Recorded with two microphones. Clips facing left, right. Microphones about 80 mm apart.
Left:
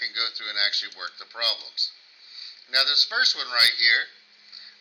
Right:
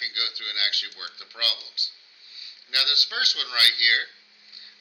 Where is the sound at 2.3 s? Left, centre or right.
Left.